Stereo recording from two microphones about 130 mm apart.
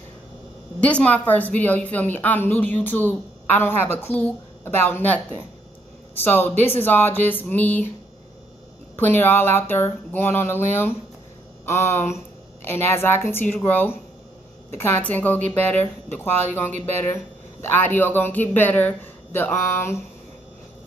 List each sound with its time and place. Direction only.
0.7 s a woman's voice: 10° left (ahead or behind)
6.2 s a woman's voice: 15° left (ahead or behind)
8.9 s a woman's voice: 15° left (ahead or behind)